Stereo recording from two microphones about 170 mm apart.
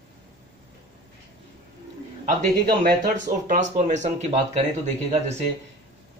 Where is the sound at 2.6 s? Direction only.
70° right (ahead or behind).